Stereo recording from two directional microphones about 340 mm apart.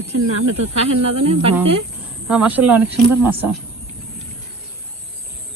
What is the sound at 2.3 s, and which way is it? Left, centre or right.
Speech, centre.